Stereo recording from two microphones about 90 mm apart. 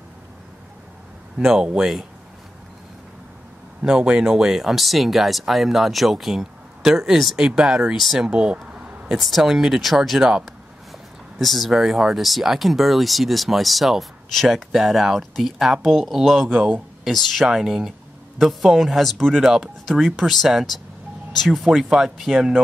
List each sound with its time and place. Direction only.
1.4 s speech: 10° right (ahead or behind)
3.8 s speech: 10° right (ahead or behind)
16.4 s speech: 15° right (ahead or behind)
17.0 s speech: centre (ahead or behind)